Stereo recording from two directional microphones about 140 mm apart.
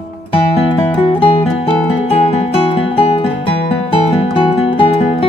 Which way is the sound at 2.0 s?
45° left (ahead or behind).